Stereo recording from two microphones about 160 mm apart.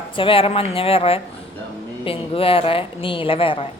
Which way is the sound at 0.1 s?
35° left (ahead or behind).